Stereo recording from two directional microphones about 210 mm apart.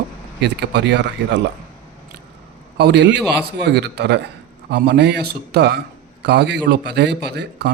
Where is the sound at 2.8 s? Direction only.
55° right (ahead or behind).